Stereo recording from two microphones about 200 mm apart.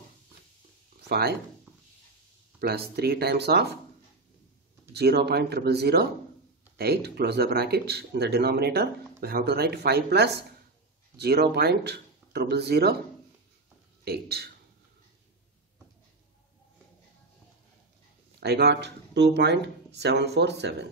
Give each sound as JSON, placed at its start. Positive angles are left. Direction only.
{"t": 1.0, "sound": "speech", "side_deg": -55}
{"t": 2.6, "sound": "speech", "side_deg": -50}
{"t": 4.9, "sound": "speech", "side_deg": -55}
{"t": 14.0, "sound": "speech", "side_deg": -55}
{"t": 18.4, "sound": "speech", "side_deg": -55}